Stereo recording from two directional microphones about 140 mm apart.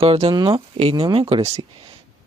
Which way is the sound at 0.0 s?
45° right (ahead or behind).